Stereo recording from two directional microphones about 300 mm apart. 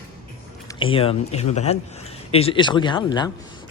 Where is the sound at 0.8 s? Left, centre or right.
Centre.